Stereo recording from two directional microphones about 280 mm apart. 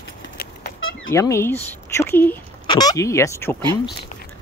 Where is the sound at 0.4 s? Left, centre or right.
Left.